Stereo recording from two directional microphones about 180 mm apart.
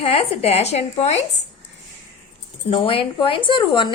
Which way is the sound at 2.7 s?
30° left (ahead or behind).